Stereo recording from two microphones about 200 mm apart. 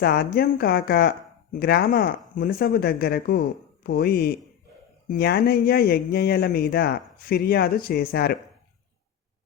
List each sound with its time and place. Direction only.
0.0 s speech: 50° left (ahead or behind)